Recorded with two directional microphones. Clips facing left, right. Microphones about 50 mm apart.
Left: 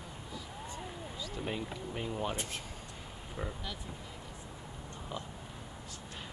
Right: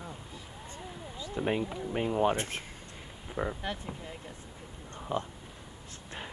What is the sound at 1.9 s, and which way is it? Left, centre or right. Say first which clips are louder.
Speech: right 10 dB; right.